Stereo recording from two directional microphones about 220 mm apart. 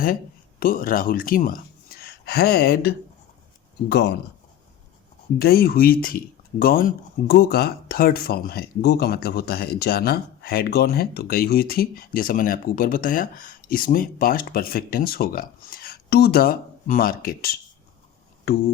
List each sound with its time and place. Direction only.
0.6 s speech: 40° left (ahead or behind)
5.4 s speech: 45° left (ahead or behind)